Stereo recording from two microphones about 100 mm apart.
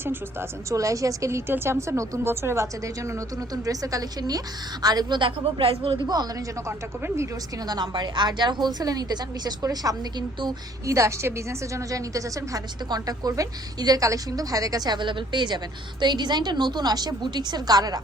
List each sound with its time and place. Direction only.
0.0 s a woman's voice: 25° right (ahead or behind); by 6.0 s 65° right (ahead or behind)
6.7 s speech: 25° right (ahead or behind)
7.7 s a woman's voice: 40° right (ahead or behind)
10.9 s a woman's voice: 30° right (ahead or behind)